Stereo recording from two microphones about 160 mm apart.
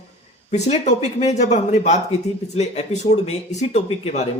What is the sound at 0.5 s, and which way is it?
Speech, 45° left (ahead or behind).